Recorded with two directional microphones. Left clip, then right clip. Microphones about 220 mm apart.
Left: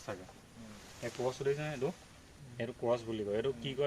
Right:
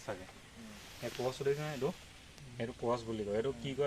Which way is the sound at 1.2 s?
25° left (ahead or behind).